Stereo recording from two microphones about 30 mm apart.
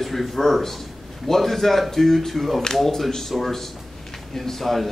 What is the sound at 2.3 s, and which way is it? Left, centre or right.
Speech, centre.